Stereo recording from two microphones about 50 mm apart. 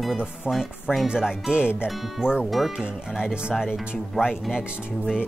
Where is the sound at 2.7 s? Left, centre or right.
Centre.